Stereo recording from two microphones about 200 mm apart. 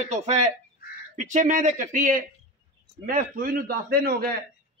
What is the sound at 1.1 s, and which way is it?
A man's voice, 40° right (ahead or behind).